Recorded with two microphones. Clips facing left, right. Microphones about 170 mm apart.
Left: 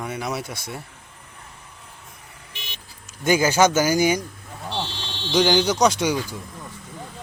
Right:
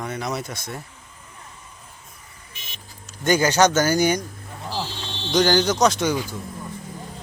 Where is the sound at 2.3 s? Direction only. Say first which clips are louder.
Left 6 dB; 65° left (ahead or behind).